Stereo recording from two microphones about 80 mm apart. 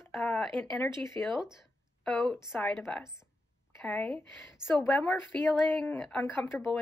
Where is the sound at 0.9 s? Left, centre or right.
Left.